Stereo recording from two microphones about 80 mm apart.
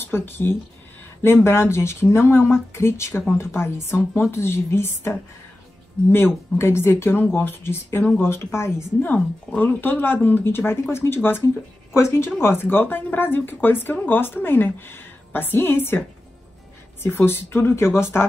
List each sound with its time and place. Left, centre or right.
0.0 s speech: left
9.1 s speech: centre
17.0 s speech: left